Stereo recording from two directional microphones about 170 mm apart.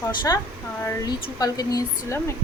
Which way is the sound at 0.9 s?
20° left (ahead or behind).